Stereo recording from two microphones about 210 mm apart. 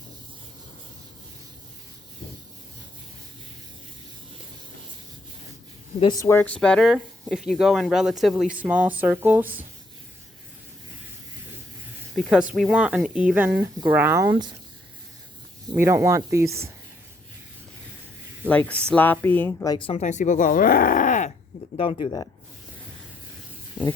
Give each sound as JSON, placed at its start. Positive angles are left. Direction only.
{"t": 6.0, "sound": "speech", "side_deg": 20}
{"t": 12.1, "sound": "a woman's voice", "side_deg": -5}
{"t": 15.7, "sound": "a woman's voice", "side_deg": -10}
{"t": 18.4, "sound": "speech", "side_deg": 5}